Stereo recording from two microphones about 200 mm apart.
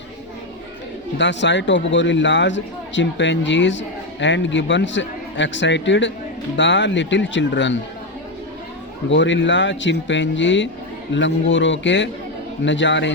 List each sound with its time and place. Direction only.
1.2 s a man's voice: 65° left (ahead or behind)
9.0 s a man's voice: 65° left (ahead or behind)